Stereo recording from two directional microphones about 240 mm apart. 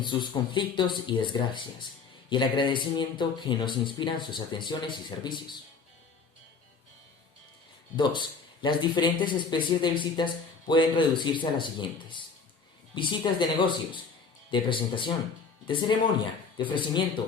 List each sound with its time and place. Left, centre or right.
0.0 s speech: centre
7.9 s speech: centre